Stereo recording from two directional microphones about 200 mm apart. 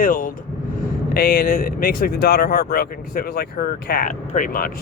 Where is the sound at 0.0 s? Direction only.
45° left (ahead or behind).